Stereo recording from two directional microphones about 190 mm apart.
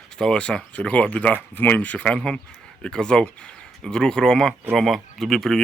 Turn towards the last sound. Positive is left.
turn(degrees=0)  # may be behind; listen again after turning